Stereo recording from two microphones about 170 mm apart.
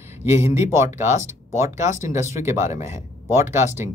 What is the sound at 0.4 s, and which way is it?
Speech, 15° right (ahead or behind).